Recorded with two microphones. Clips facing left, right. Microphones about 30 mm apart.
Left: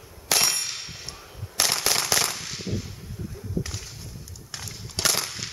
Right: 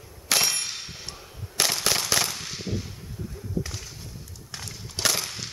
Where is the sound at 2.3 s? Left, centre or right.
Centre.